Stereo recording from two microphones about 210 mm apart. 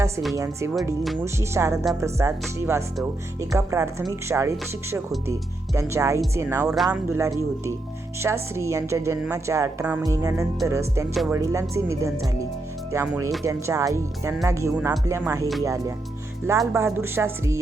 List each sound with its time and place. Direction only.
0.3 s a woman's voice: 15° right (ahead or behind)
11.1 s speech: centre (ahead or behind)
11.3 s a woman's voice: 15° right (ahead or behind)
16.5 s a woman's voice: 15° right (ahead or behind)